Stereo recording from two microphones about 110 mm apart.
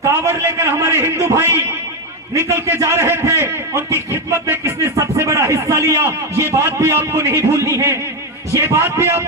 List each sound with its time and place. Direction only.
0.3 s a man's voice: 25° right (ahead or behind)
2.5 s a man's voice: 25° right (ahead or behind)